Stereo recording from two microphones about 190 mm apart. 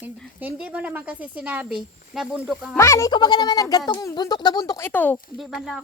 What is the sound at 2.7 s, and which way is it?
Speech, 15° left (ahead or behind).